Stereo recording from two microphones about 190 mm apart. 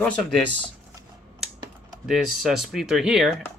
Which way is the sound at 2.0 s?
Centre (ahead or behind).